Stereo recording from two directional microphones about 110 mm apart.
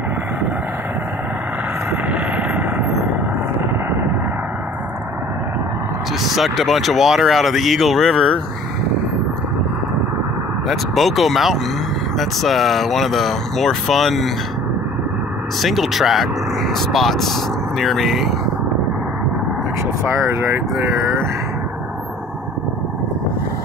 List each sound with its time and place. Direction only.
1.9 s vehicle: 15° right (ahead or behind)
6.3 s speech: centre (ahead or behind)
10.7 s speech: centre (ahead or behind)
15.6 s speech: centre (ahead or behind)
20.2 s speech: 25° right (ahead or behind)